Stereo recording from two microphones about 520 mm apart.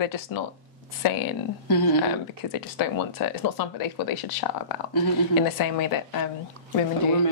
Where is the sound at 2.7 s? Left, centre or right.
Left.